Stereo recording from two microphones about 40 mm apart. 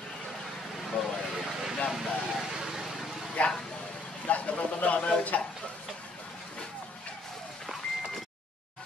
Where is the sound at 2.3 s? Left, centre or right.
Centre.